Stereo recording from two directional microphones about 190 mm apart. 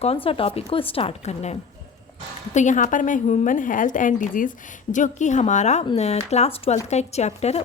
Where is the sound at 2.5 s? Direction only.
40° left (ahead or behind).